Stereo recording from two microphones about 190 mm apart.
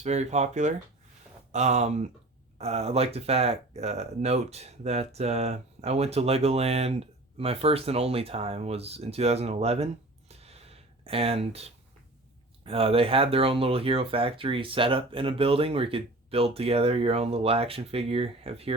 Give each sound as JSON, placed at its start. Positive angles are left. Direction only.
{"t": 0.0, "sound": "speech", "side_deg": -35}